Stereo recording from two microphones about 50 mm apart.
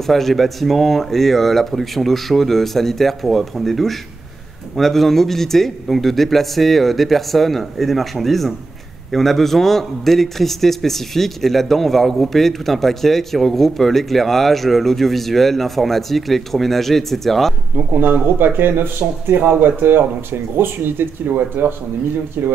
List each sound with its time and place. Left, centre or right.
0.0 s a man's voice: centre
17.7 s speech: right